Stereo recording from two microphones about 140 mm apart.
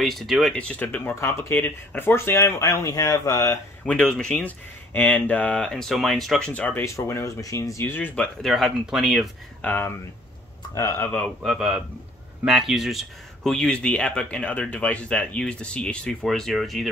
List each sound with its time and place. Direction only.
0.0 s speech: centre (ahead or behind); by 3.5 s 25° left (ahead or behind)
3.8 s speech: 5° left (ahead or behind)
9.6 s speech: 15° left (ahead or behind)
11.4 s a man's voice: centre (ahead or behind)